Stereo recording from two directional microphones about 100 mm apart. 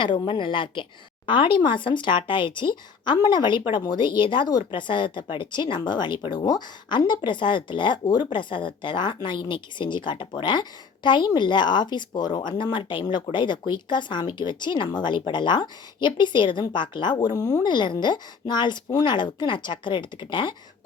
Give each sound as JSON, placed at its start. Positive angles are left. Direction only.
{"t": 0.0, "sound": "speech", "side_deg": 55}